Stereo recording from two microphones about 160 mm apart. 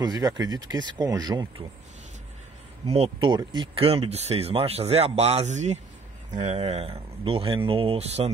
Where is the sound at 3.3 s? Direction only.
25° right (ahead or behind).